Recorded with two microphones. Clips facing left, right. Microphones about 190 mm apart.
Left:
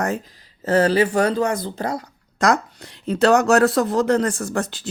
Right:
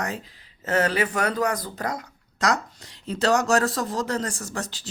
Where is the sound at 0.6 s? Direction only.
30° left (ahead or behind).